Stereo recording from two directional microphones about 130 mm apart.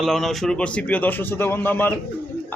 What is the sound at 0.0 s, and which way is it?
A man's voice, centre (ahead or behind).